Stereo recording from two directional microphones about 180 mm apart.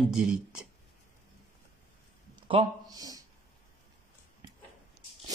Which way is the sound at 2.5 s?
25° right (ahead or behind).